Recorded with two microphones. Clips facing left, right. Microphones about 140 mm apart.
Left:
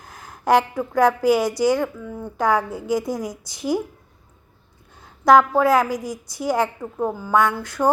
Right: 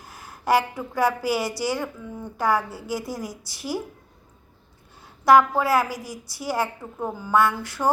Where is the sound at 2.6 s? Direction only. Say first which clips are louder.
Left 5 dB; 50° left (ahead or behind).